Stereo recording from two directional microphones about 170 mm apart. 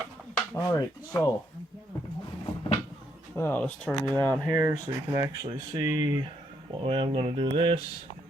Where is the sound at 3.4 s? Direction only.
10° left (ahead or behind).